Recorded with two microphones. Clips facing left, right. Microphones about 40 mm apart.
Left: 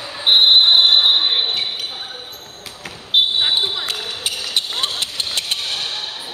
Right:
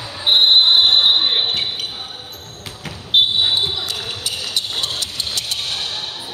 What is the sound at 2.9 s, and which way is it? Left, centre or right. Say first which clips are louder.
Basketball bounce: right 1 dB; centre.